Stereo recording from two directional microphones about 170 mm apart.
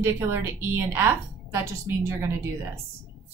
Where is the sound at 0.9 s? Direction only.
15° right (ahead or behind).